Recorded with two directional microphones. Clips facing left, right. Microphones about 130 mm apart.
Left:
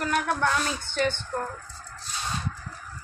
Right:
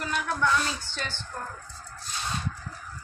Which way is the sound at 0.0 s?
50° left (ahead or behind).